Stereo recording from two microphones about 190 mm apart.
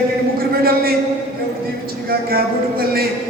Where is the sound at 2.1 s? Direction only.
55° right (ahead or behind).